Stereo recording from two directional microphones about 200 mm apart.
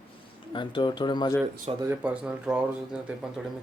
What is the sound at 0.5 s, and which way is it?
Speech, 25° left (ahead or behind).